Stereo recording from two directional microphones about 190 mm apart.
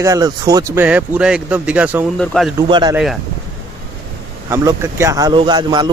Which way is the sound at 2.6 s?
20° right (ahead or behind).